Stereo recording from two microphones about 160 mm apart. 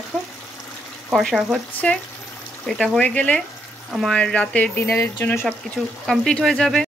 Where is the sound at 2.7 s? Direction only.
Centre (ahead or behind).